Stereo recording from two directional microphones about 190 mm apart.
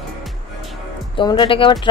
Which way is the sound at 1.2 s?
25° left (ahead or behind).